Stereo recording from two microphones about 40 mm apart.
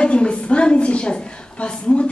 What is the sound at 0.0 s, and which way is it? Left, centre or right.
A woman's voice, left.